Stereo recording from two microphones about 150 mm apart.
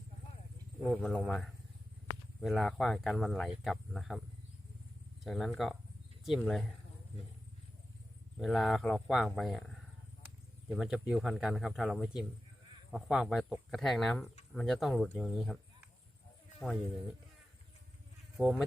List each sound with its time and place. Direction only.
0.9 s speech: 5° left (ahead or behind)
5.2 s speech: centre (ahead or behind)
8.4 s speech: centre (ahead or behind)
18.3 s speech: centre (ahead or behind)